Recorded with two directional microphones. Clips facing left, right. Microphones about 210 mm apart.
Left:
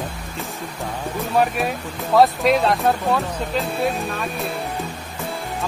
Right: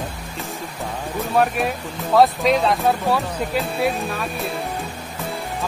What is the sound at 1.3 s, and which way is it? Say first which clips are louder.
Speech: right 1 dB; centre (ahead or behind).